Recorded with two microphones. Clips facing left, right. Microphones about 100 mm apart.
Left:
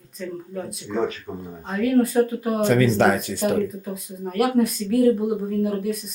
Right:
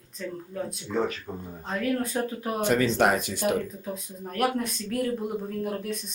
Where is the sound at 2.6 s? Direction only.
20° right (ahead or behind).